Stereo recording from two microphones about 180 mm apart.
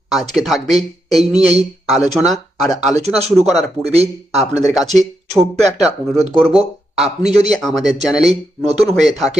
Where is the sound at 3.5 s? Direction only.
35° right (ahead or behind).